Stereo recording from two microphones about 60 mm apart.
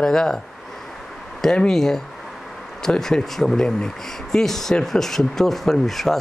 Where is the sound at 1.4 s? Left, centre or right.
Centre.